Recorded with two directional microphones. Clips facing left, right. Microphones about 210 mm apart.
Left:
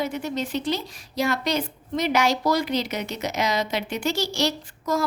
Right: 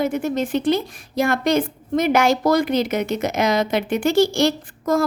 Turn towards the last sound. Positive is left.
turn(degrees=-50)  # may be behind; listen again after turning